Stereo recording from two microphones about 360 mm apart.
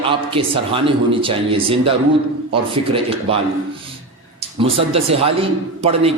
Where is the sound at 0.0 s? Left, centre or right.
Centre.